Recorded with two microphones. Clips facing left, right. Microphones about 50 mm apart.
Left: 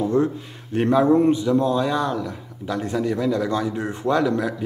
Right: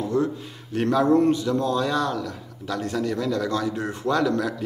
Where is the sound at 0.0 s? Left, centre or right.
Left.